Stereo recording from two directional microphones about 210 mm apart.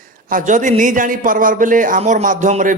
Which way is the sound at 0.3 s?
40° right (ahead or behind).